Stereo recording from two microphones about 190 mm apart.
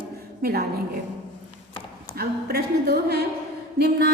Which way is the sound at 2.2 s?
55° right (ahead or behind).